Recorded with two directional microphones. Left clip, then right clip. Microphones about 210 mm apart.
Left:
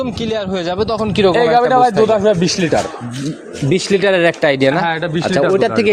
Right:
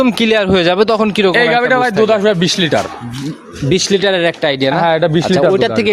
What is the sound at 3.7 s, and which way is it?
Speech, 15° right (ahead or behind).